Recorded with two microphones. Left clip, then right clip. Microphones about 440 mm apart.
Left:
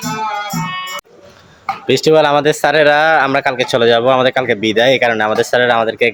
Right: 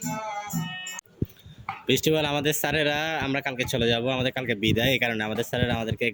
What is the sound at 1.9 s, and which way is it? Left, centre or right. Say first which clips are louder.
Speech: left 14 dB; right.